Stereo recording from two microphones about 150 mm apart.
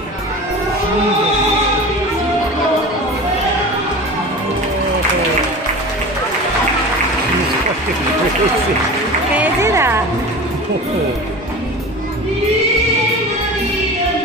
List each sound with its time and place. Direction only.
9.4 s music: 15° right (ahead or behind)